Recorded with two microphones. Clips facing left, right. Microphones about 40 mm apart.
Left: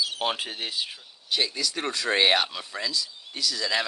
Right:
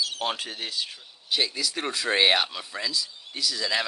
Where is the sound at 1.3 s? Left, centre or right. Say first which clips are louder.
Even; centre.